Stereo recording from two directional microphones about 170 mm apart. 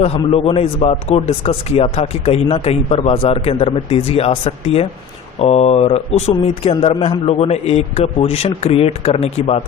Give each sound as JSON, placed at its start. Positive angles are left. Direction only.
{"t": 0.2, "sound": "speech", "side_deg": 35}